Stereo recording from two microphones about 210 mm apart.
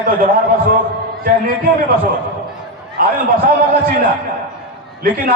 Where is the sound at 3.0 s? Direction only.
40° right (ahead or behind).